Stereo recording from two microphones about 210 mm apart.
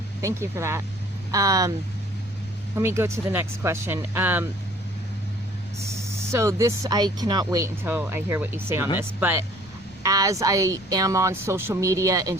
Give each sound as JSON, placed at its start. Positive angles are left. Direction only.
{"t": 0.2, "sound": "speech", "side_deg": -15}
{"t": 2.7, "sound": "speech", "side_deg": -15}
{"t": 6.1, "sound": "speech", "side_deg": -15}